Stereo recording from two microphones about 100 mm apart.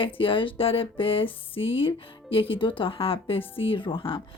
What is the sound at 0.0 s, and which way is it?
Speech, 60° left (ahead or behind).